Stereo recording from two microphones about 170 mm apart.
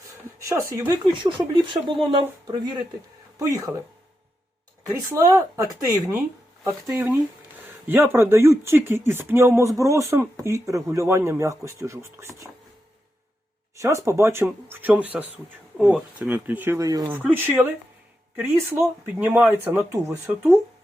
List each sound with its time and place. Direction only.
0.4 s speech: 15° right (ahead or behind)
1.2 s speech: 30° right (ahead or behind)
5.1 s speech: 20° right (ahead or behind)
13.9 s speech: 15° right (ahead or behind)